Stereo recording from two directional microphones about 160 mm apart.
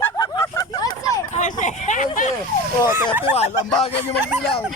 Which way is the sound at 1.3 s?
50° left (ahead or behind).